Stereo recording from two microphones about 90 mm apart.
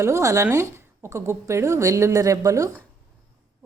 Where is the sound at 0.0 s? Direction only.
35° right (ahead or behind).